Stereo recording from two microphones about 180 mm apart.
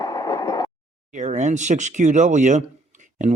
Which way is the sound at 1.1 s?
40° right (ahead or behind).